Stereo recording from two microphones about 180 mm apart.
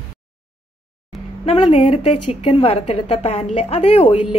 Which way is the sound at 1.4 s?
30° left (ahead or behind).